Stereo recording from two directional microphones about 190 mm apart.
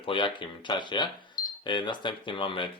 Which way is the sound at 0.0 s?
25° left (ahead or behind).